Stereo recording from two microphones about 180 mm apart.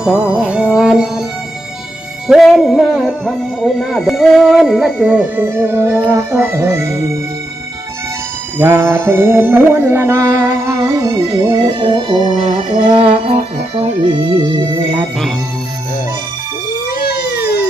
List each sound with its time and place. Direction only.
0.0 s music: 5° right (ahead or behind)
2.2 s speech: 5° right (ahead or behind)
6.1 s music: 15° right (ahead or behind)
8.5 s music: 15° right (ahead or behind)
12.9 s speech: 30° right (ahead or behind)
16.9 s music: 60° left (ahead or behind)